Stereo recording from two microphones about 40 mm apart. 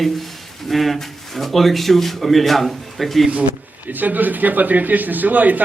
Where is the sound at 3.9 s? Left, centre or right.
Right.